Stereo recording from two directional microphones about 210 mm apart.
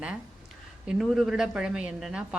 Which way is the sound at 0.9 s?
Centre (ahead or behind).